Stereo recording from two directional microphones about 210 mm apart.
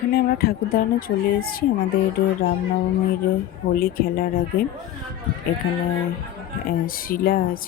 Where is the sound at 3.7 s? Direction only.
45° left (ahead or behind).